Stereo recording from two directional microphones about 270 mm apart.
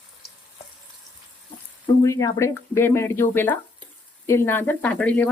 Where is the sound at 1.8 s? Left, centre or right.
Centre.